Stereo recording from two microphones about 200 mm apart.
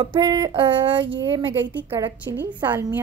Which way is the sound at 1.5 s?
10° right (ahead or behind).